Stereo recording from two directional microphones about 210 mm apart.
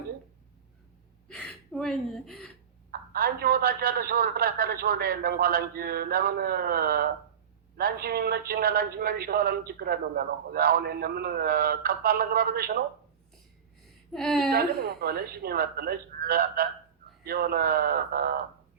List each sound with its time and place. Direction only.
1.3 s a woman's voice: centre (ahead or behind)
2.9 s a man's voice: 45° right (ahead or behind)
14.1 s speech: centre (ahead or behind)
14.5 s a man's voice: 45° right (ahead or behind)